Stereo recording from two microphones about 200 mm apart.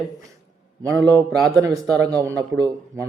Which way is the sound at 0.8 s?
15° right (ahead or behind).